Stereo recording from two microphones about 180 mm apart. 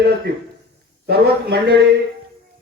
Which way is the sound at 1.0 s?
65° right (ahead or behind).